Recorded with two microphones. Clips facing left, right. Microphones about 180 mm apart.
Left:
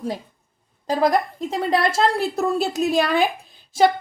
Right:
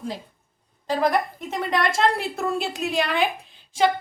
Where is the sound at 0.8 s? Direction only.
35° left (ahead or behind).